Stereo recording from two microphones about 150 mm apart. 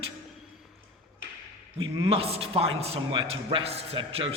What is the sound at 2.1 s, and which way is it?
A man's voice, 40° right (ahead or behind).